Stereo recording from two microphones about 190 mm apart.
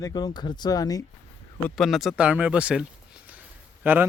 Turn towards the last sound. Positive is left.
turn(degrees=-10)  # may be behind; listen again after turning